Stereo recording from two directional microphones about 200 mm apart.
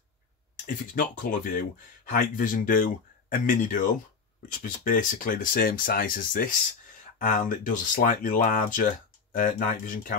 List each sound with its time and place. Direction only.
0.7 s speech: 40° left (ahead or behind)